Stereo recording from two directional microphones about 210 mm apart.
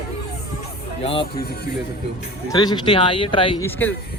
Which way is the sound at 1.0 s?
25° left (ahead or behind).